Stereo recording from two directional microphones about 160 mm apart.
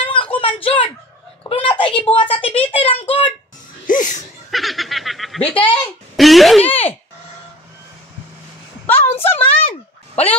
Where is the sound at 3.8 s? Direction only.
55° left (ahead or behind).